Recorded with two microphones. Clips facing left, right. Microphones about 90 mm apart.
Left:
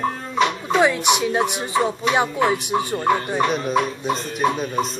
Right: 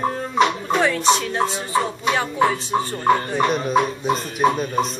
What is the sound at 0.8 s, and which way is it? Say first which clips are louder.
Speech: even; 15° left (ahead or behind).